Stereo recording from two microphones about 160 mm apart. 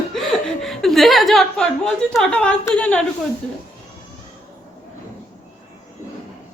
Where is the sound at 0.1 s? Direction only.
Centre (ahead or behind).